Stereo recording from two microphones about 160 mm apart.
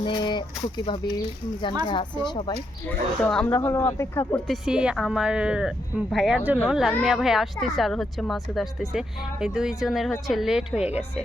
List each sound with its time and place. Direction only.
0.0 s speech: 30° left (ahead or behind)
1.9 s speech: 30° left (ahead or behind)
3.2 s speech: 5° left (ahead or behind)
3.5 s speech: 15° left (ahead or behind)
4.4 s speech: 5° right (ahead or behind)